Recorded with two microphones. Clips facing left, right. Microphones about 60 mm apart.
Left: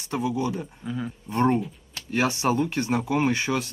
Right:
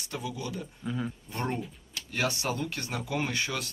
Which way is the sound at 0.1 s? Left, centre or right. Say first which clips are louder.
Left 10 dB; left.